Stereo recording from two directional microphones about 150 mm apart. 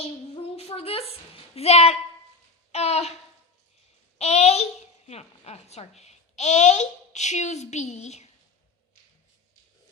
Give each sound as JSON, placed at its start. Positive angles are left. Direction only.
{"t": 0.0, "sound": "a sound", "side_deg": 40}
{"t": 4.2, "sound": "child singing", "side_deg": 45}
{"t": 5.0, "sound": "a child's voice", "side_deg": 45}